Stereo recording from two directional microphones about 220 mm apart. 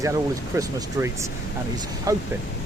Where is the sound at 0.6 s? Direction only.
15° right (ahead or behind).